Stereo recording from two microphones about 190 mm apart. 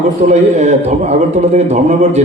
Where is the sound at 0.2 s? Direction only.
35° right (ahead or behind).